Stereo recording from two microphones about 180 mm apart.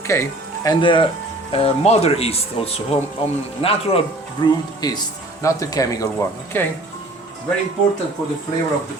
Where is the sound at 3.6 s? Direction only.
30° left (ahead or behind).